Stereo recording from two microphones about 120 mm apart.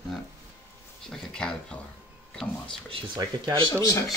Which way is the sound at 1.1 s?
5° left (ahead or behind).